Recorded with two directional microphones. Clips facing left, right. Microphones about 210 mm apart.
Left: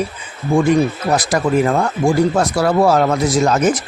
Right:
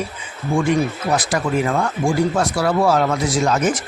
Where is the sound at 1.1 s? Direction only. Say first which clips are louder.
Left 5 dB; 40° left (ahead or behind).